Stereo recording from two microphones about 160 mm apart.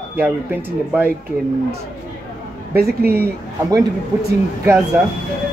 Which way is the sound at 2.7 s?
70° right (ahead or behind).